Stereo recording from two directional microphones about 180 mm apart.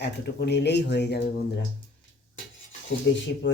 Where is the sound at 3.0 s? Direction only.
80° left.